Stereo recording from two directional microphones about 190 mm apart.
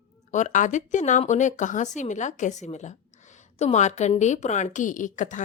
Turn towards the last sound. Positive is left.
turn(degrees=40)  # may be behind; listen again after turning